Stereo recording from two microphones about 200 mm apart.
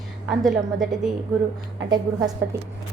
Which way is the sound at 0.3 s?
Centre (ahead or behind).